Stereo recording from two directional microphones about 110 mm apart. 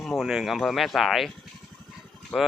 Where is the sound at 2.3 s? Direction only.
5° left (ahead or behind).